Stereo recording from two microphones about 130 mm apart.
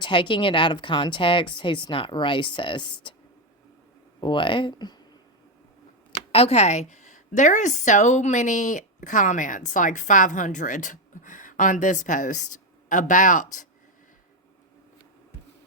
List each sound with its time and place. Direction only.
0.0 s a woman's voice: 40° left (ahead or behind)
4.2 s a woman's voice: 40° left (ahead or behind)
6.1 s speech: 50° left (ahead or behind); by 13.7 s 85° left